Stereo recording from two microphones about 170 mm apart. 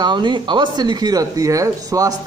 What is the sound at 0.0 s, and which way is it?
A man's voice, 25° right (ahead or behind).